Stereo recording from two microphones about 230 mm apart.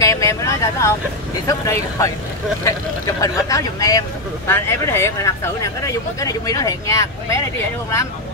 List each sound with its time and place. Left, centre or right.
0.0 s vehicle: centre
1.5 s speech: centre
3.2 s speech: centre